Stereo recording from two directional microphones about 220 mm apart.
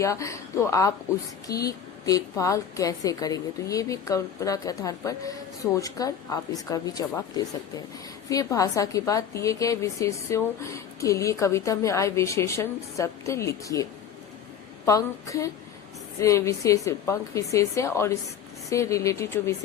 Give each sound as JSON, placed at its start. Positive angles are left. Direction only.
{"t": 0.0, "sound": "a woman's voice", "side_deg": 15}
{"t": 8.3, "sound": "a woman's voice", "side_deg": 15}
{"t": 14.8, "sound": "a woman's voice", "side_deg": 15}